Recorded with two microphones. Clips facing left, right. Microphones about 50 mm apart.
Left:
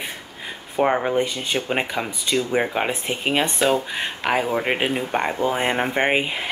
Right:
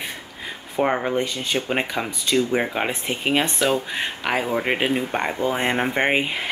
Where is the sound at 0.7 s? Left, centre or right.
Centre.